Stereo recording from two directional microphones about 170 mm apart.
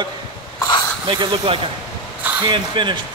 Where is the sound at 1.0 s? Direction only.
30° right (ahead or behind).